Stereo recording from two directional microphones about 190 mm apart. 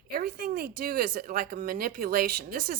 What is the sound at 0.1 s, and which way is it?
Speech, 50° right (ahead or behind).